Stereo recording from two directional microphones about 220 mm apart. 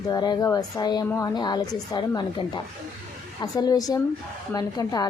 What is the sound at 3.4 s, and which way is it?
A woman's voice, 15° left (ahead or behind).